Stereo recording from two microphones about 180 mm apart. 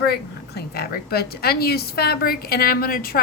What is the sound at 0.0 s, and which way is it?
A woman's voice, 60° left (ahead or behind).